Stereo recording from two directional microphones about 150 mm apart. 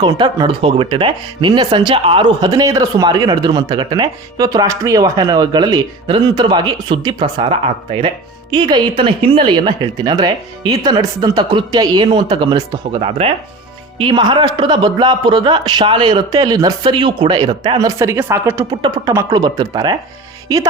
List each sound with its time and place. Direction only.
0.0 s a man's voice: 30° right (ahead or behind)